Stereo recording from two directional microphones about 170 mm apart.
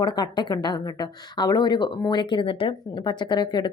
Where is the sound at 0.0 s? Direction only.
25° left (ahead or behind).